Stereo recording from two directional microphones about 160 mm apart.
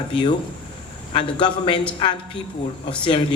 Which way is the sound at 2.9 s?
30° left (ahead or behind).